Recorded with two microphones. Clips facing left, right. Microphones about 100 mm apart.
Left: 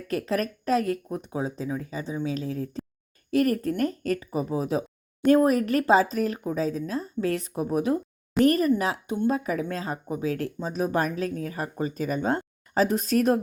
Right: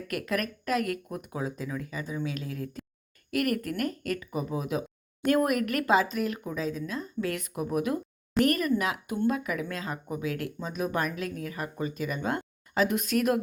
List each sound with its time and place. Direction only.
0.1 s speech: 30° left (ahead or behind)